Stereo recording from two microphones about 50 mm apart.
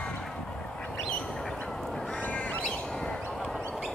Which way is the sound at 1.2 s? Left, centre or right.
Centre.